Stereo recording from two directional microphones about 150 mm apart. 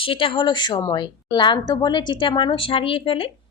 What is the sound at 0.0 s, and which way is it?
A woman's voice, 35° left (ahead or behind).